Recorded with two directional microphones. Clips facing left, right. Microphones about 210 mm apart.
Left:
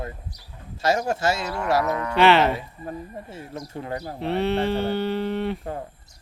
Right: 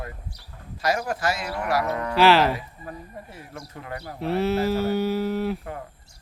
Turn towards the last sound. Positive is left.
turn(degrees=-5)  # may be behind; listen again after turning